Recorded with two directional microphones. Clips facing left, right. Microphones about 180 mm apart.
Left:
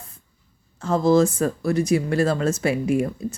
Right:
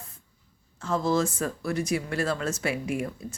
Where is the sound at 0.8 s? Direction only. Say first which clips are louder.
Left 8 dB; 40° left (ahead or behind).